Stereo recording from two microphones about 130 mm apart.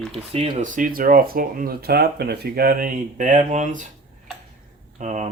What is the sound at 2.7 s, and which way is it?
Speech, 90° right.